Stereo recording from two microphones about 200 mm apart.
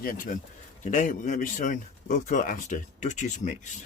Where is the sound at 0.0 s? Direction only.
45° left (ahead or behind).